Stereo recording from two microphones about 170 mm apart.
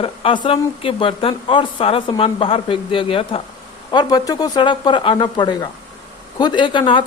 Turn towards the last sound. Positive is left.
turn(degrees=30)  # may be behind; listen again after turning